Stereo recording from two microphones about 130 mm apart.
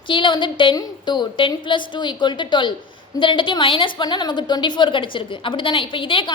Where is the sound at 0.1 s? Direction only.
40° left (ahead or behind).